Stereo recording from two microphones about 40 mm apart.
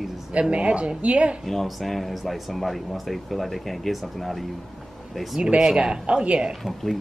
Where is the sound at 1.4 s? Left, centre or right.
Centre.